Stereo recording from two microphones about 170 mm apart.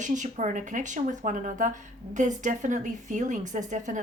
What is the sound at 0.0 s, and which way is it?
A woman's voice, 45° right (ahead or behind).